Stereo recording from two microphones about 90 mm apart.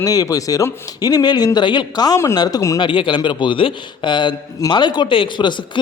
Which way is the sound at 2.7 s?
65° left (ahead or behind).